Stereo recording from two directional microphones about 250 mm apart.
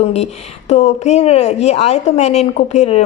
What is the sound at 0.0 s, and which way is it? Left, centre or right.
A woman's voice, left.